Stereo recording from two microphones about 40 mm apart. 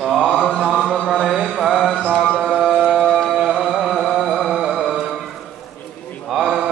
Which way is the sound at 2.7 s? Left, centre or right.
Right.